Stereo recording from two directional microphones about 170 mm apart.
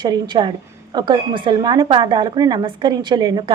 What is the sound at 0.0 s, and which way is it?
Speech, 25° right (ahead or behind).